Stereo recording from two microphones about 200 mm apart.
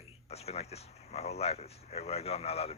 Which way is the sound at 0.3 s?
30° left (ahead or behind).